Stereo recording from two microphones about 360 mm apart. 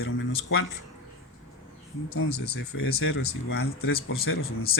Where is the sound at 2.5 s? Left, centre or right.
Left.